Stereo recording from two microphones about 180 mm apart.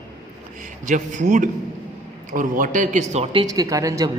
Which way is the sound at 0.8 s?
45° right (ahead or behind).